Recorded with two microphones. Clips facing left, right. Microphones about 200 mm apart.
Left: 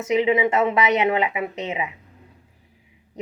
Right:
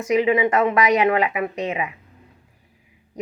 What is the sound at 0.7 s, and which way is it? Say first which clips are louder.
Speech: right 2 dB; 25° left (ahead or behind).